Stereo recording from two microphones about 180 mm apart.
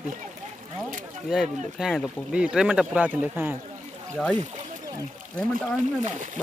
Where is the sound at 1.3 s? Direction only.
5° right (ahead or behind).